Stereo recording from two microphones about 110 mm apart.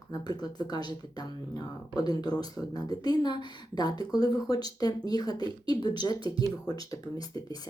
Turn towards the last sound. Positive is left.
turn(degrees=35)  # may be behind; listen again after turning